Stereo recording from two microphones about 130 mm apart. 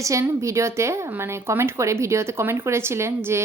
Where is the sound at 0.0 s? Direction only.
25° right (ahead or behind).